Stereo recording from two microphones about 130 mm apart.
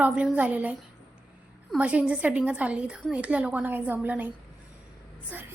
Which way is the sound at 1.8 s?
10° right (ahead or behind).